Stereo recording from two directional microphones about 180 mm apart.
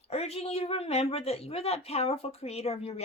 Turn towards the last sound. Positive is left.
turn(degrees=35)  # may be behind; listen again after turning